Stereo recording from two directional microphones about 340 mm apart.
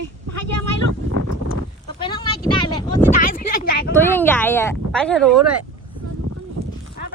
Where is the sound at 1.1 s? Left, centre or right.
Right.